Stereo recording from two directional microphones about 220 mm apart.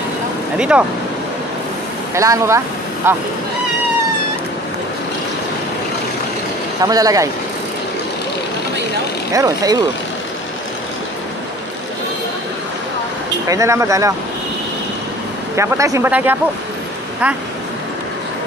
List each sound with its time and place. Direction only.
0.6 s speech: 5° right (ahead or behind)
2.1 s speech: 15° right (ahead or behind)
6.8 s speech: 15° right (ahead or behind)
9.3 s speech: 15° right (ahead or behind)
13.5 s speech: 15° right (ahead or behind)
15.5 s speech: 10° right (ahead or behind)